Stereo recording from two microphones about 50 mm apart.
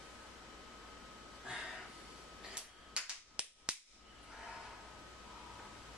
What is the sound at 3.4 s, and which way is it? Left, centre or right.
Whip, right.